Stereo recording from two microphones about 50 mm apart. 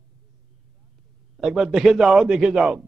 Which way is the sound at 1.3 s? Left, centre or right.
Centre.